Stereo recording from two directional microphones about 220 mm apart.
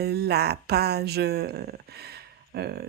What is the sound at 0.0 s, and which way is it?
Speech, 45° right (ahead or behind).